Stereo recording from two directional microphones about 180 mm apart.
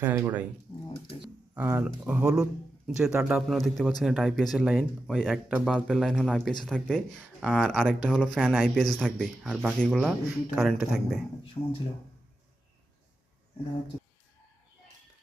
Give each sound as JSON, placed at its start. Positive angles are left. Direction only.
{"t": 0.0, "sound": "speech", "side_deg": -10}
{"t": 1.5, "sound": "speech", "side_deg": -10}
{"t": 11.6, "sound": "speech", "side_deg": 25}